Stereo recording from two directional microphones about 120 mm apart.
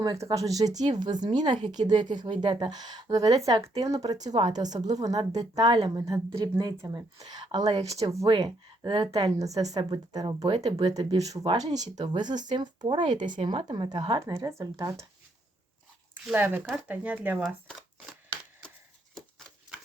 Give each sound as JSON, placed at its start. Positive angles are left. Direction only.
{"t": 0.0, "sound": "a woman's voice", "side_deg": -30}
{"t": 8.3, "sound": "speech", "side_deg": -40}
{"t": 9.1, "sound": "speech", "side_deg": -30}
{"t": 14.6, "sound": "a woman's voice", "side_deg": -30}
{"t": 16.3, "sound": "speech", "side_deg": -15}